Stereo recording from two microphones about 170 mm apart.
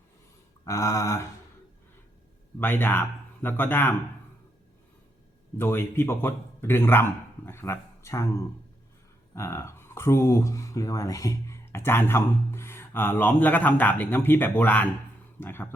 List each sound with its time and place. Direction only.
0.6 s speech: 20° left (ahead or behind)
2.6 s speech: 10° left (ahead or behind)
5.5 s speech: 15° left (ahead or behind)
9.3 s speech: 15° left (ahead or behind)